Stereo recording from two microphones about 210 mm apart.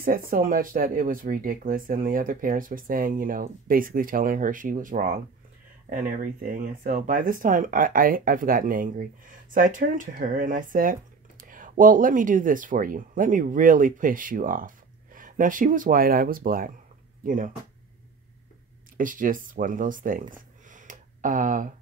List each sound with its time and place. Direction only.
0.0 s speech: 45° right (ahead or behind)
18.9 s speech: 40° right (ahead or behind)